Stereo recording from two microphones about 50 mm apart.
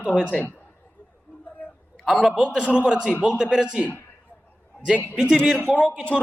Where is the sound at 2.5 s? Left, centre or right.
Right.